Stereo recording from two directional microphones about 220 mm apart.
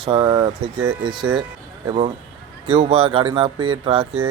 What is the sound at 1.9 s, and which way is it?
Speech, 25° right (ahead or behind).